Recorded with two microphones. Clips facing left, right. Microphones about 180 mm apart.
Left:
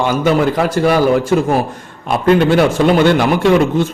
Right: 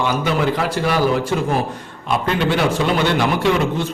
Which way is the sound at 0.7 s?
45° left (ahead or behind).